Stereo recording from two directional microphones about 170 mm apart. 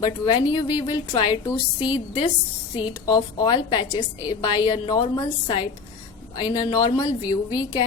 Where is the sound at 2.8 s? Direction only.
25° left (ahead or behind).